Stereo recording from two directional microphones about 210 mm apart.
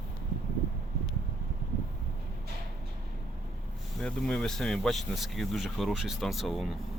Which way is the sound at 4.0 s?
5° left (ahead or behind).